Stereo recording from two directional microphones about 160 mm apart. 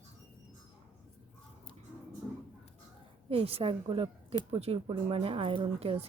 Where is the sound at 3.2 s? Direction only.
35° right (ahead or behind).